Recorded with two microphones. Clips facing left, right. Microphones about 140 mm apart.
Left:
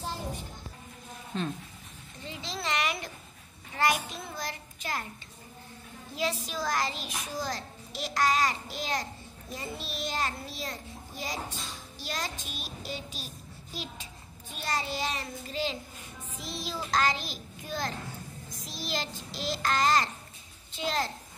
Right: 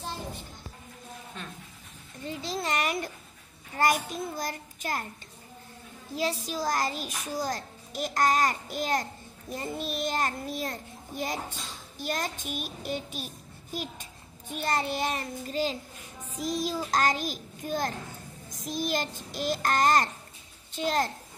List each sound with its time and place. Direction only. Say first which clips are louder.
2.2 s a child's voice: right 4 dB; 45° right (ahead or behind)
6.1 s a child's voice: right 2 dB; 40° right (ahead or behind); by 13.3 s 55° right (ahead or behind)
14.5 s a child's voice: right 4 dB; 55° right (ahead or behind)